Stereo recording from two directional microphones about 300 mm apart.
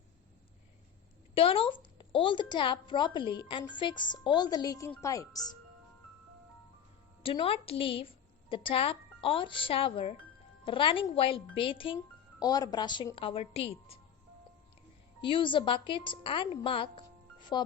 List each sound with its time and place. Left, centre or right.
1.4 s a woman's voice: centre
7.2 s a woman's voice: centre
15.2 s a woman's voice: centre